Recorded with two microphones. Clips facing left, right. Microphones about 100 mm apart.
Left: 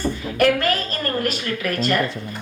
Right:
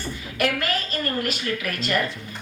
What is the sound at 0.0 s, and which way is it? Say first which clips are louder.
A woman's voice: left 7 dB; 45° left (ahead or behind).